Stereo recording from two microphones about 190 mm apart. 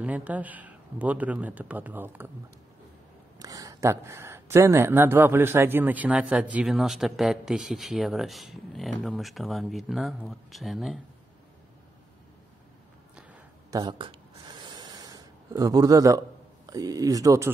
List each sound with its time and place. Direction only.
0.0 s speech: 5° right (ahead or behind)
3.3 s speech: 20° right (ahead or behind); by 11.0 s centre (ahead or behind)
13.7 s speech: 20° right (ahead or behind)
14.7 s a sound: 20° right (ahead or behind)
16.6 s speech: 20° right (ahead or behind)